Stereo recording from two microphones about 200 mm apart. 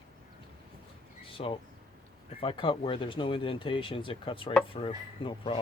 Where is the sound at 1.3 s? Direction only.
25° left (ahead or behind).